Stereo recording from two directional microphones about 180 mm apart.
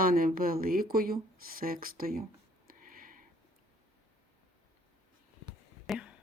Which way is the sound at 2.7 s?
50° right (ahead or behind).